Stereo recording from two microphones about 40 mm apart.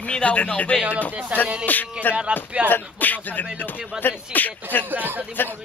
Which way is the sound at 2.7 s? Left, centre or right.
Left.